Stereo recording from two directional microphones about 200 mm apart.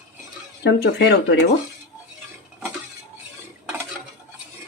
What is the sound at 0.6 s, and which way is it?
Speech, 60° left (ahead or behind).